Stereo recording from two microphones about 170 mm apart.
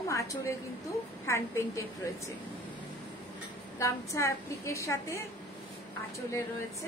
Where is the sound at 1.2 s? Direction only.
15° left (ahead or behind).